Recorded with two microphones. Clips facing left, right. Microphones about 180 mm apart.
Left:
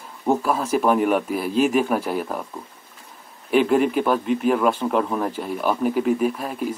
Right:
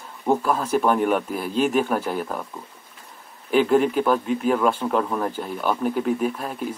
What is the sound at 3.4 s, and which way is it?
Speech, centre (ahead or behind).